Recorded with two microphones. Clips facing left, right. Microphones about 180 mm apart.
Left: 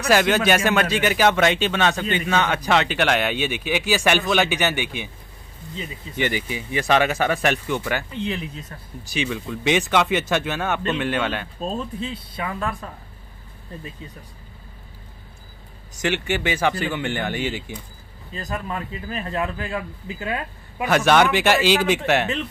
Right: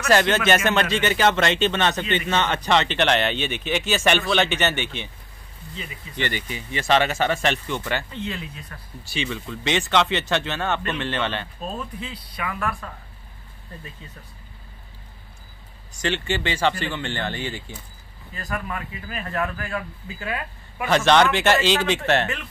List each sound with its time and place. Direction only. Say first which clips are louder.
0.1 s a man's voice: left 1 dB; 10° left (ahead or behind)
6.1 s a man's voice: left 4 dB; 10° left (ahead or behind)
11.6 s speech: left 4 dB; 25° left (ahead or behind)
16.0 s a man's voice: left 2 dB; 15° left (ahead or behind)
20.9 s a man's voice: even; 10° left (ahead or behind)